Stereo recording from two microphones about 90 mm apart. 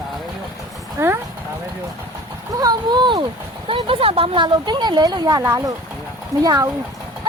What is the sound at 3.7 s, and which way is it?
Speech, 90° right.